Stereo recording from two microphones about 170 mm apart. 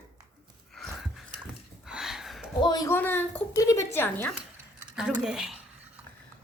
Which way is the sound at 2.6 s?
20° left (ahead or behind).